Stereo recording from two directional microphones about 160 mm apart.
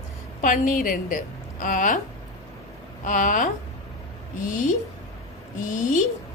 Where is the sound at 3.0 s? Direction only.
55° left (ahead or behind).